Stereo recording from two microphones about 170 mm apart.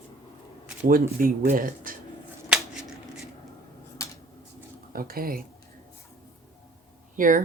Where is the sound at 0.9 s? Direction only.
55° right (ahead or behind).